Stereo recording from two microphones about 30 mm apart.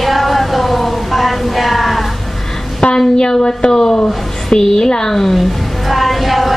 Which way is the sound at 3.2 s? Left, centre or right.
Left.